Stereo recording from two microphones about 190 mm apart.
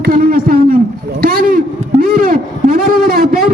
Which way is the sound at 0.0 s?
50° right (ahead or behind).